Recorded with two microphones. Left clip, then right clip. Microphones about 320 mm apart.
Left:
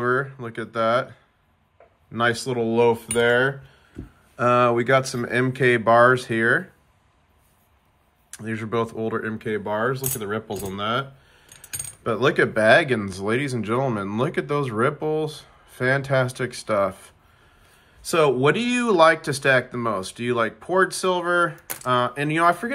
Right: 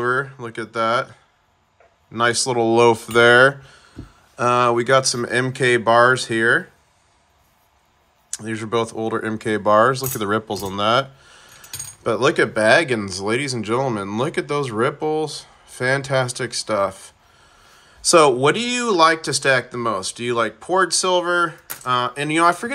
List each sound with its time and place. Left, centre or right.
0.0 s a sound: centre
2.1 s speech: centre
4.4 s speech: centre
8.3 s speech: centre